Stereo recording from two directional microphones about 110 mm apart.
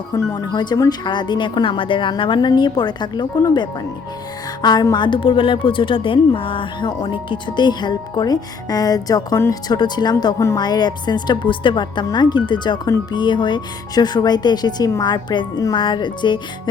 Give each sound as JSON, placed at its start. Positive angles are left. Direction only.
{"t": 0.1, "sound": "a woman's voice", "side_deg": 35}